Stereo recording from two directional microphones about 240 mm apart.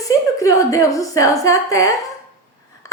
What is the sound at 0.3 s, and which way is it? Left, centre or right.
A woman's voice, centre.